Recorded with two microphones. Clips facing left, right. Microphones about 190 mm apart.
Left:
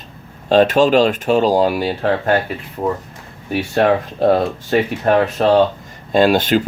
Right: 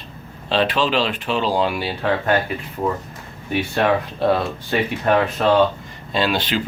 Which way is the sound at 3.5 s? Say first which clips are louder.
Left 4 dB; 40° left (ahead or behind).